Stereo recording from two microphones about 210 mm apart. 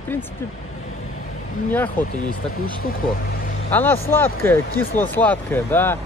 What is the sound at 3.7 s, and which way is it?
Speech, 10° left (ahead or behind).